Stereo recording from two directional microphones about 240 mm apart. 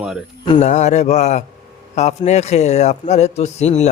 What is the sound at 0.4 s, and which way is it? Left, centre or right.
A man's voice, left.